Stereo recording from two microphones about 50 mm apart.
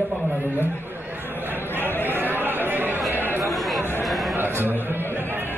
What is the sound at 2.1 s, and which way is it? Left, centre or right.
Chatter, right.